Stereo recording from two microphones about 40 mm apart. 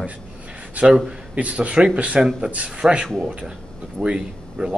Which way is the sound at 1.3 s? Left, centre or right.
Right.